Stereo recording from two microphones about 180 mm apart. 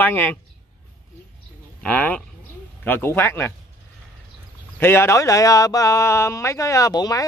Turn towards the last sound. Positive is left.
turn(degrees=20)  # may be behind; listen again after turning